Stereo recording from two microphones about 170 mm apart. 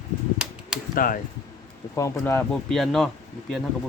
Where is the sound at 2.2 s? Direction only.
10° left (ahead or behind).